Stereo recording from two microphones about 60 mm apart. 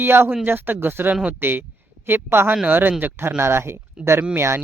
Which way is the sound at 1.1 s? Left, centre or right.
Right.